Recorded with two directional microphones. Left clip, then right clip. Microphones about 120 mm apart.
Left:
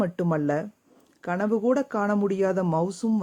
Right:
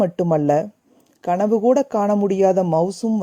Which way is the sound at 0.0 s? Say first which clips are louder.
Right 8 dB; 35° right (ahead or behind).